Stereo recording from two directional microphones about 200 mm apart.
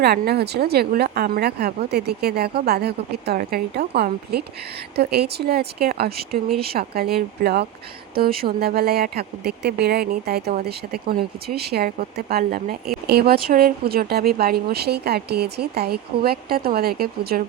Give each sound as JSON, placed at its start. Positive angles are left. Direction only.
{"t": 0.0, "sound": "speech", "side_deg": -55}